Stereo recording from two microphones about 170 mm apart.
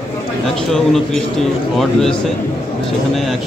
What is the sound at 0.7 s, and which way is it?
A man's voice, centre (ahead or behind).